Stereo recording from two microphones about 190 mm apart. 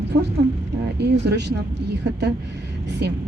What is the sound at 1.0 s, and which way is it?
Speech, 65° right (ahead or behind).